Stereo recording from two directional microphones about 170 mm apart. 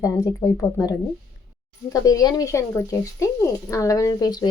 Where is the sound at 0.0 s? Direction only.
15° left (ahead or behind).